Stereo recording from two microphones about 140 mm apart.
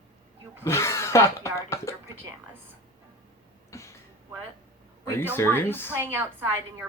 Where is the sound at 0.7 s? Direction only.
20° left (ahead or behind).